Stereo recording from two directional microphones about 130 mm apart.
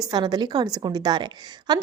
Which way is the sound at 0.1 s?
35° right (ahead or behind).